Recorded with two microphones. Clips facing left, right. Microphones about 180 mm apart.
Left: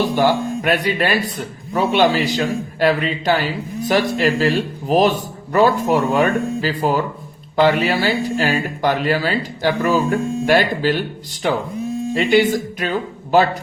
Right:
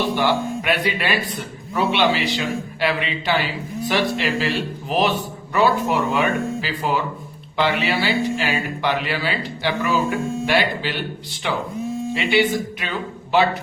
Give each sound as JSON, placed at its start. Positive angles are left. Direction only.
{"t": 0.2, "sound": "speech", "side_deg": 45}